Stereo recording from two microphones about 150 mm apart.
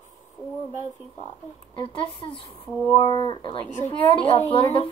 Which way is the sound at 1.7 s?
35° left (ahead or behind).